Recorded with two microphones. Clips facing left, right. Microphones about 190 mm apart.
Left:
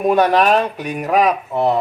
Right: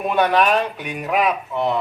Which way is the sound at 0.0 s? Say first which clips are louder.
Left 4 dB; 40° left (ahead or behind).